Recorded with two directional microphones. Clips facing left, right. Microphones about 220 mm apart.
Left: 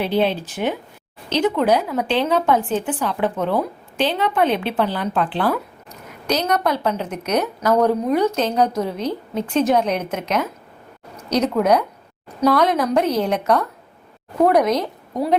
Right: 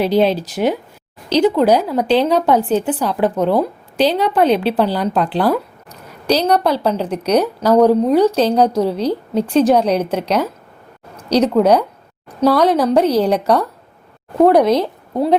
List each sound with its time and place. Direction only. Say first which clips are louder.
0.0 s a woman's voice: right 5 dB; 40° right (ahead or behind)